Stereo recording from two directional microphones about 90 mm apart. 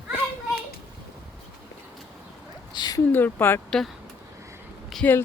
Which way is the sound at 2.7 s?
50° left (ahead or behind).